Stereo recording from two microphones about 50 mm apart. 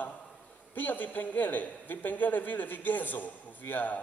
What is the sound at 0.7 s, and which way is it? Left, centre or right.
A man's voice, left.